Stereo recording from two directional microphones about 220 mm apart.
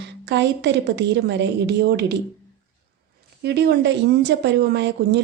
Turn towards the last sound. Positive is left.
turn(degrees=-50)  # may be behind; listen again after turning